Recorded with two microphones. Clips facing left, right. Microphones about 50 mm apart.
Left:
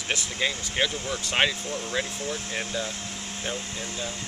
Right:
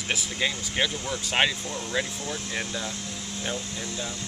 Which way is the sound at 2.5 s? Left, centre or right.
Left.